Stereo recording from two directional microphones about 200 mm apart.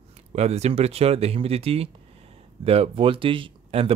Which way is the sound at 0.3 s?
35° right (ahead or behind).